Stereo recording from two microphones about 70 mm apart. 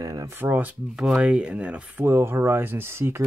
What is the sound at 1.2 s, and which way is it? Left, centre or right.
Speech, centre.